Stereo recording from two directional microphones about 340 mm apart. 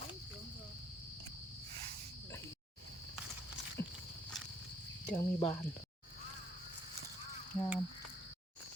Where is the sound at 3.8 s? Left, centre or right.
Left.